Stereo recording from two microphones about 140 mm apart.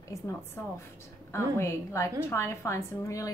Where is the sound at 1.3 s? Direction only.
20° left (ahead or behind).